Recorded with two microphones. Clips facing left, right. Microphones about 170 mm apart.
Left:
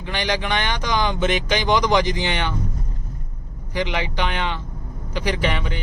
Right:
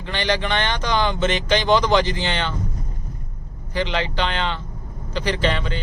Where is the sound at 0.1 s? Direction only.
10° left (ahead or behind).